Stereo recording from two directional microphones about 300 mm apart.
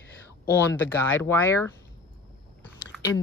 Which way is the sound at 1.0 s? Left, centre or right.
Centre.